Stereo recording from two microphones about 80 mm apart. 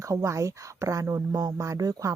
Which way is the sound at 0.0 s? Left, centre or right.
Right.